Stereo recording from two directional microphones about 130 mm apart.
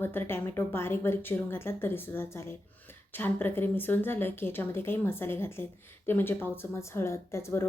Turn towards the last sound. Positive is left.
turn(degrees=20)  # may be behind; listen again after turning